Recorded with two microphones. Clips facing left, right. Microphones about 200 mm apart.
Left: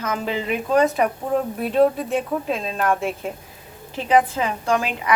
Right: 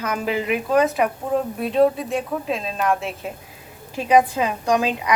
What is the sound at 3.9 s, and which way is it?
Speech, 15° right (ahead or behind).